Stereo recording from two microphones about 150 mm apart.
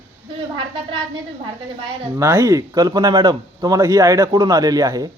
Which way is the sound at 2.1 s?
20° right (ahead or behind).